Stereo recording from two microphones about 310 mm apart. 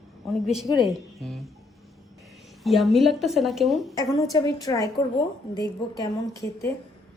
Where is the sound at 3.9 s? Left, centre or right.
Centre.